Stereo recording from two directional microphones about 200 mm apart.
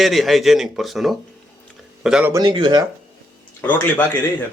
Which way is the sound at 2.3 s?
25° right (ahead or behind).